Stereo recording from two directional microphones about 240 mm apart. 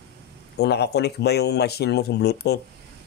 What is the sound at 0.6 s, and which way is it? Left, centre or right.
Speech, left.